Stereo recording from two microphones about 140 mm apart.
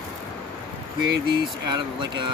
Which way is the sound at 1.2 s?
35° right (ahead or behind).